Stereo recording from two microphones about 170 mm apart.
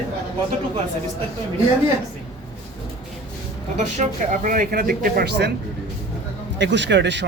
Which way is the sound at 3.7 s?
45° right (ahead or behind).